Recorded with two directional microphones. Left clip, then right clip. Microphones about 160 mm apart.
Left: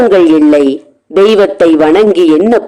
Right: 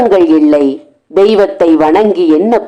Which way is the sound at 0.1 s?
35° left (ahead or behind).